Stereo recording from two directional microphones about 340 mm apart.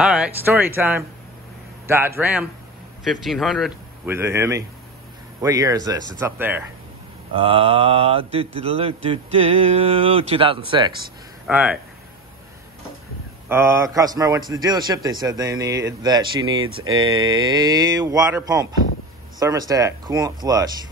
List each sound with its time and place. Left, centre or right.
0.0 s speech: centre
7.4 s speech: centre
11.4 s speech: centre
13.5 s speech: centre
16.6 s speech: right
17.1 s speech: centre